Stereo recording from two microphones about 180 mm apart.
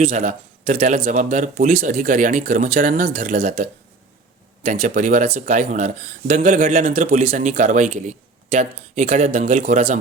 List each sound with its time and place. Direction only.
0.0 s speech: 45° right (ahead or behind)